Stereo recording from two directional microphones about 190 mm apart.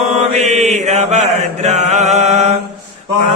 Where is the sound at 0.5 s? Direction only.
35° right (ahead or behind).